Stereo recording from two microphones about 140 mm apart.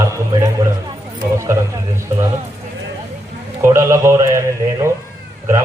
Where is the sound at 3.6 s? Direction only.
20° right (ahead or behind).